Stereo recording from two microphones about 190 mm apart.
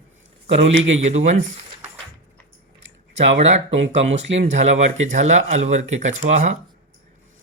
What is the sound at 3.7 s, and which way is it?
Speech, 75° right (ahead or behind).